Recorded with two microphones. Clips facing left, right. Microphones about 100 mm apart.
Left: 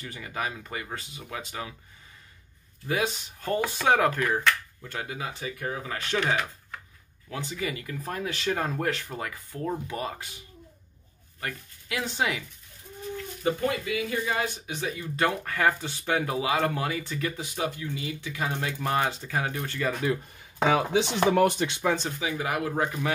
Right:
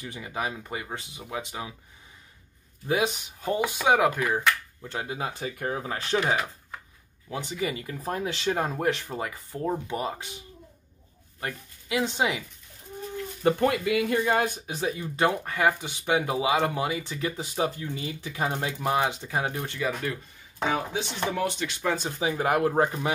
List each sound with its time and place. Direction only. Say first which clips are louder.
0.0 s speech: right 1 dB; 20° right (ahead or behind)
3.3 s speech: right 1 dB; 10° right (ahead or behind)
4.8 s speech: right 3 dB; 25° right (ahead or behind)
5.2 s speech: right 2 dB; 40° right (ahead or behind)
5.8 s speech: right 3 dB; 25° right (ahead or behind)
6.2 s speech: right 1 dB; 5° right (ahead or behind)
7.2 s speech: right 2 dB; 25° right (ahead or behind)
11.4 s speech: right 1 dB; 20° right (ahead or behind)
13.4 s speech: right 5 dB; 50° right (ahead or behind)
13.7 s speech: right 4 dB; 70° right (ahead or behind); by 14.8 s 50° right (ahead or behind)
14.8 s speech: right 2 dB; 25° right (ahead or behind)
20.5 s speech: left 5 dB; 90° left
22.2 s speech: right 5 dB; 40° right (ahead or behind)
22.7 s speech: right 4 dB; 30° right (ahead or behind)